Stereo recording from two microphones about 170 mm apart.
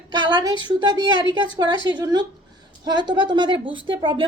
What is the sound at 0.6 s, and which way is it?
A woman's voice, 25° right (ahead or behind).